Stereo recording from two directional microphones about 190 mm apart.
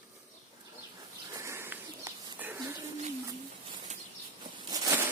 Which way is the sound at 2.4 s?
10° right (ahead or behind).